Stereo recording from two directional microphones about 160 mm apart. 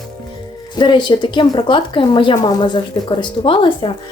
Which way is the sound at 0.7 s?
30° left (ahead or behind).